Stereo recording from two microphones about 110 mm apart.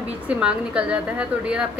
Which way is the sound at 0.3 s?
10° right (ahead or behind).